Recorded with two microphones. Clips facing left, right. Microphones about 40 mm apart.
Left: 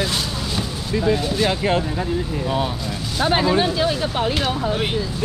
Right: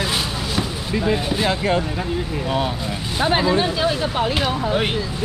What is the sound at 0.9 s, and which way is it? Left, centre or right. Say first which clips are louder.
Speech: left 1 dB; centre.